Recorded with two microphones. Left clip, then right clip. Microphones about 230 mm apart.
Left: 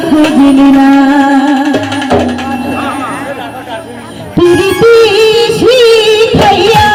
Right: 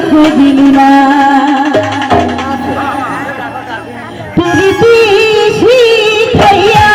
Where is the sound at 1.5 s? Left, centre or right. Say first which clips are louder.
Right 2 dB; left.